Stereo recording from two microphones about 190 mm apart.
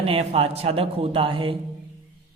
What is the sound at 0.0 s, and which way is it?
A man's voice, 30° right (ahead or behind).